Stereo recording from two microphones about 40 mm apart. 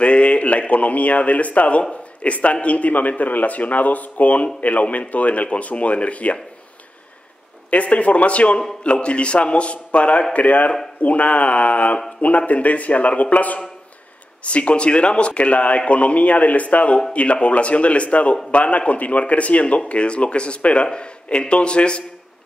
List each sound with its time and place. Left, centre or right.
0.0 s a man's voice: left
7.7 s a man's voice: left